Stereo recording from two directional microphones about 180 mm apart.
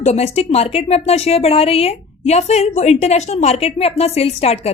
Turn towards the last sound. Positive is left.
turn(degrees=35)  # may be behind; listen again after turning